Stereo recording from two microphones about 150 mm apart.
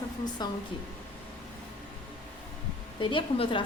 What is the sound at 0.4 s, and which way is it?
Speech, 30° left (ahead or behind).